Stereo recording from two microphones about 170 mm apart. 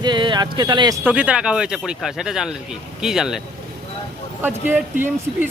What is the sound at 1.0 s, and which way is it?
Speech, 10° right (ahead or behind).